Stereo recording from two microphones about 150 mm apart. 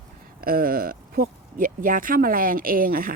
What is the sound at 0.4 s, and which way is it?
Speech, 75° right (ahead or behind).